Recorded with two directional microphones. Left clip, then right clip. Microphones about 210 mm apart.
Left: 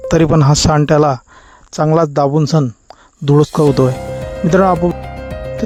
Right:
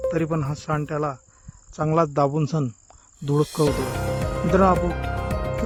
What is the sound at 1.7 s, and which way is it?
Speech, 35° left (ahead or behind).